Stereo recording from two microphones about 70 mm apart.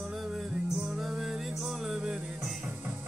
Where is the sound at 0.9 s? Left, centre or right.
Centre.